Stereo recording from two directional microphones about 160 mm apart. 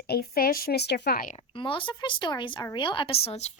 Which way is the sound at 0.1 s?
70° left (ahead or behind).